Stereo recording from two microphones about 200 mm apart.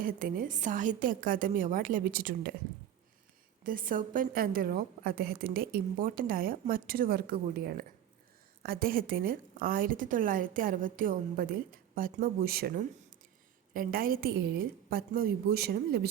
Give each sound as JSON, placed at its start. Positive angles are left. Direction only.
{"t": 0.0, "sound": "a woman's voice", "side_deg": -45}
{"t": 3.6, "sound": "a woman's voice", "side_deg": -45}